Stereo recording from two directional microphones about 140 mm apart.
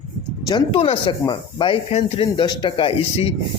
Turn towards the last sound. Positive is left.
turn(degrees=45)  # may be behind; listen again after turning